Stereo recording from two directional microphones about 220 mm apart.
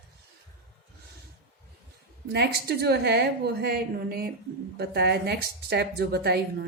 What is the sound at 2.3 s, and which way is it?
Speech, 45° right (ahead or behind).